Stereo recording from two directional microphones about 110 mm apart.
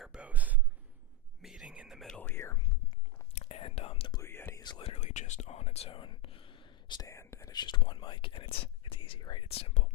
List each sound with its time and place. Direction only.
0.0 s a sound: 10° right (ahead or behind)
1.4 s whispering: 5° right (ahead or behind)
2.1 s whispering: 15° left (ahead or behind)
2.4 s whispering: 25° left (ahead or behind)
3.3 s whispering: 65° left (ahead or behind)
4.2 s whispering: 20° left (ahead or behind)
4.8 s whispering: 75° left (ahead or behind); by 7.1 s 45° left (ahead or behind)
7.1 s whispering: 25° left (ahead or behind)
7.5 s speech: 40° left (ahead or behind)
9.5 s speech: 65° left (ahead or behind)